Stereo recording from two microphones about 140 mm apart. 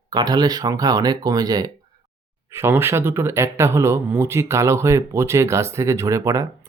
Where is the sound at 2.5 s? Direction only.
15° right (ahead or behind).